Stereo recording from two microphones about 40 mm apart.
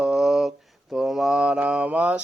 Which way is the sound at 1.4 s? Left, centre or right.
Right.